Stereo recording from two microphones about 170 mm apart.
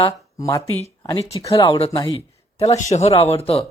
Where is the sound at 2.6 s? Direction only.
40° left (ahead or behind).